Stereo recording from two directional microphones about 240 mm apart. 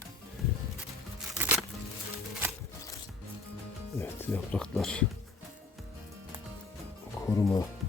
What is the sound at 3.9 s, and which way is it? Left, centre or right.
Music, centre.